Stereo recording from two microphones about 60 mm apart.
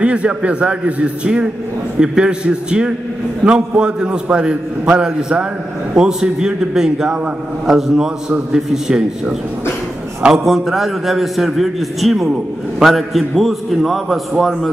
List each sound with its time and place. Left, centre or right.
0.0 s a man's voice: centre